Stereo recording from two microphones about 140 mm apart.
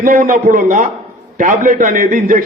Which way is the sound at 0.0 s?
85° right.